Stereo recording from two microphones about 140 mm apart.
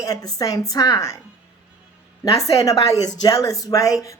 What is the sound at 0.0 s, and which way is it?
Speech, 25° left (ahead or behind).